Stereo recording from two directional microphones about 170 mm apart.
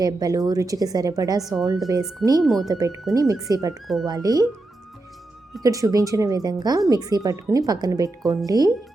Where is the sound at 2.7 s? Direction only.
20° right (ahead or behind).